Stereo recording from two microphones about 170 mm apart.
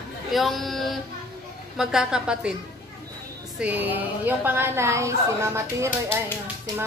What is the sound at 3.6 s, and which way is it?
A woman's voice, 10° right (ahead or behind).